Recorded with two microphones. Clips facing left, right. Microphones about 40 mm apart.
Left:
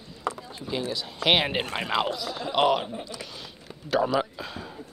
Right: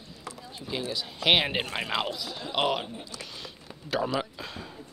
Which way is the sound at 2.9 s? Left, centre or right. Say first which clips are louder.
Left 5 dB; left.